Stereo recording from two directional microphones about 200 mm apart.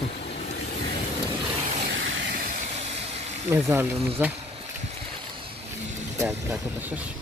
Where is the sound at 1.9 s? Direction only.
70° right (ahead or behind); by 3.2 s 30° right (ahead or behind).